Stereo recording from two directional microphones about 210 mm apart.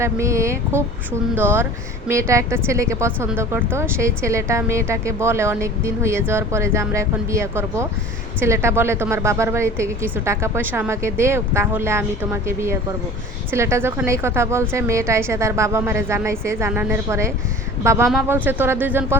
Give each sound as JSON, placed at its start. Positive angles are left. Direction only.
{"t": 0.0, "sound": "speech", "side_deg": -15}